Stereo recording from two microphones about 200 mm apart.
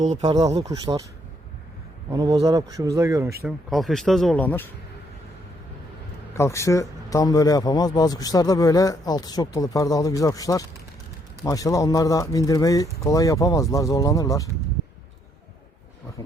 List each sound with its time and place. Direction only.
0.2 s speech: 25° right (ahead or behind)
2.0 s speech: 20° right (ahead or behind)
3.4 s speech: centre (ahead or behind)
6.3 s a man's voice: 15° left (ahead or behind)